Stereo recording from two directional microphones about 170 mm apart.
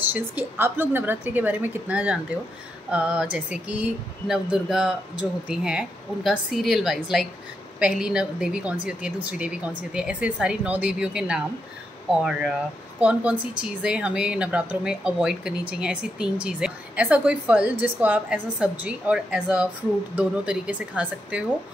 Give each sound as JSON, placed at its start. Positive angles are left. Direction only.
{"t": 0.1, "sound": "a woman's voice", "side_deg": -10}